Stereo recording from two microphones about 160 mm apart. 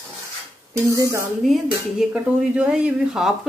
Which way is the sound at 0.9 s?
20° right (ahead or behind).